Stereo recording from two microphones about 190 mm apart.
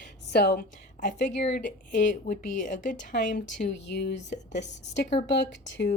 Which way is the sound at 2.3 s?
45° left (ahead or behind).